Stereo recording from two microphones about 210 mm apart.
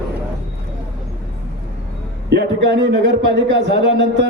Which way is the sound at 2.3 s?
55° right (ahead or behind).